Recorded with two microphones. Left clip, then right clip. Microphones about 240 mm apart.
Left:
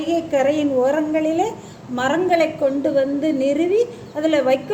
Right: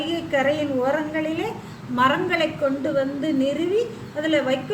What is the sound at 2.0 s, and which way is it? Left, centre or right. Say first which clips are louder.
Speech: left 2 dB; centre.